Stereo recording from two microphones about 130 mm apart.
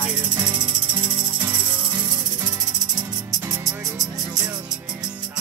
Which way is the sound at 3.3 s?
25° right (ahead or behind).